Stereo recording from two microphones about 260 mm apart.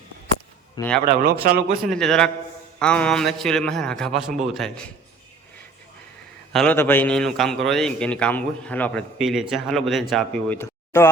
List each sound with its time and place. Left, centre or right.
0.8 s a man's voice: centre
1.0 s speech: right
1.9 s a man's voice: centre
6.5 s a man's voice: centre